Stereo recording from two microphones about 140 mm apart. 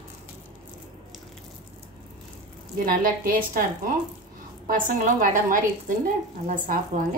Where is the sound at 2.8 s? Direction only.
90° right.